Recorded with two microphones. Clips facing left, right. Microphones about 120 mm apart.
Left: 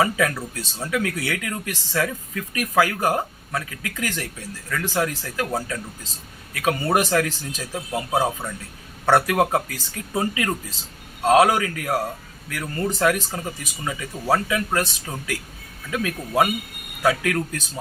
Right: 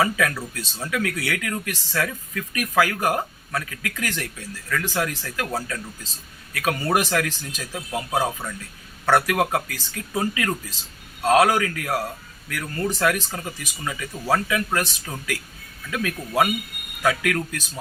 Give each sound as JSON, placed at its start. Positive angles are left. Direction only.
{"t": 0.0, "sound": "speech", "side_deg": 20}
{"t": 8.2, "sound": "speech", "side_deg": 10}
{"t": 9.0, "sound": "speech", "side_deg": 20}